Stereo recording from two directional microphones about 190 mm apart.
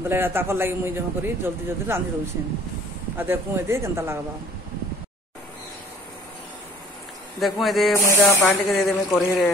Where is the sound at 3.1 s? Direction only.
10° right (ahead or behind).